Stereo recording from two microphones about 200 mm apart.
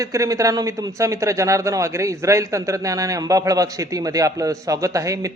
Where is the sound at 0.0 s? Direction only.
15° right (ahead or behind).